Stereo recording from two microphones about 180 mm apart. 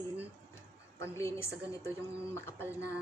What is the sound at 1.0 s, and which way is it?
A woman's voice, 15° left (ahead or behind).